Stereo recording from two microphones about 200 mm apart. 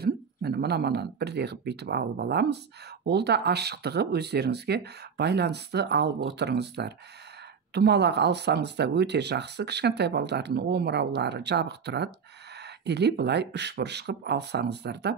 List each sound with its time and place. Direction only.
0.0 s speech: 55° right (ahead or behind)